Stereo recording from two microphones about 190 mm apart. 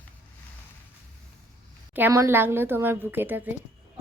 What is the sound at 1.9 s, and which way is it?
A woman's voice, 10° right (ahead or behind).